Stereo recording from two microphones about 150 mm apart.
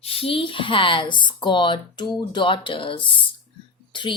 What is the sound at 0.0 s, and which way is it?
Speech, 40° left (ahead or behind).